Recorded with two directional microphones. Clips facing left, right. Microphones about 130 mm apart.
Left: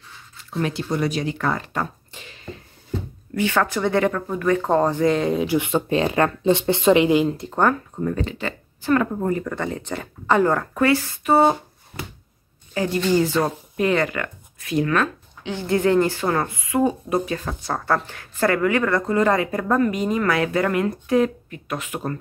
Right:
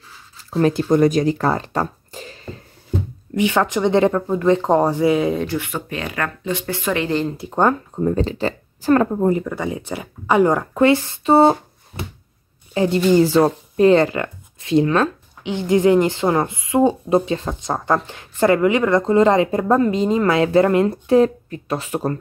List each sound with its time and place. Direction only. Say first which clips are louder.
0.4 s speech: right 8 dB; 40° right (ahead or behind)
3.3 s speech: right 3 dB; 15° right (ahead or behind); by 5.5 s centre (ahead or behind)
5.5 s speech: left 5 dB; 20° left (ahead or behind)
7.2 s speech: left 1 dB; 5° right (ahead or behind)
7.5 s speech: right 4 dB; 25° right (ahead or behind)
9.1 s speech: right 5 dB; 25° right (ahead or behind)
9.4 s speech: right 2 dB; 10° right (ahead or behind); by 11.5 s 30° right (ahead or behind)
12.7 s a woman's voice: right 5 dB; 25° right (ahead or behind)